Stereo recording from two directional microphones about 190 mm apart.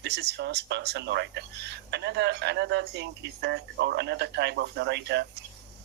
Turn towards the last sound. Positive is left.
turn(degrees=-65)  # may be behind; listen again after turning